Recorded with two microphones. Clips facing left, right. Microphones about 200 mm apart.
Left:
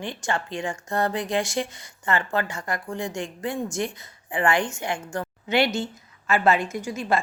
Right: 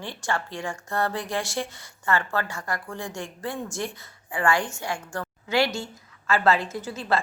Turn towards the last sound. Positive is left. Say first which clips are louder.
# left 2 dB
turn(degrees=15)  # may be behind; listen again after turning